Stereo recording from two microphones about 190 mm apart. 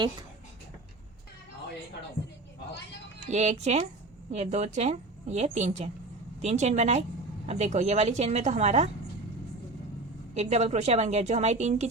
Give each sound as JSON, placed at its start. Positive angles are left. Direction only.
{"t": 3.2, "sound": "a woman's voice", "side_deg": -35}
{"t": 10.3, "sound": "a woman's voice", "side_deg": -35}